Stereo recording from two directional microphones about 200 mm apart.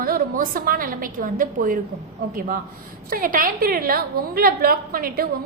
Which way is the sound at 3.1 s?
45° right (ahead or behind).